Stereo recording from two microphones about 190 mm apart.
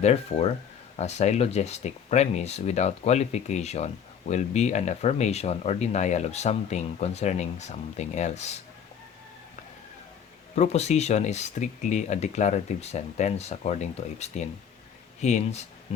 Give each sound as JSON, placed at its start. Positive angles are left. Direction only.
{"t": 0.0, "sound": "speech", "side_deg": 35}
{"t": 10.5, "sound": "speech", "side_deg": 35}